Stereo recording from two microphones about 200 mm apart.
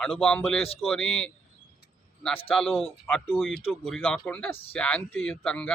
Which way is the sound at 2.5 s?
Centre (ahead or behind).